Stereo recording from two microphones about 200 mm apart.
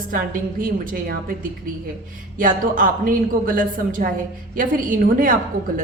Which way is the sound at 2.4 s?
45° right (ahead or behind).